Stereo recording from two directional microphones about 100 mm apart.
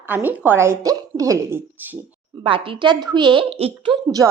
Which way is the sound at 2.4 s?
60° right (ahead or behind).